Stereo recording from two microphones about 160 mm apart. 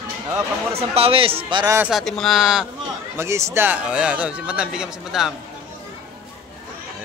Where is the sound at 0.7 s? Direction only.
40° right (ahead or behind).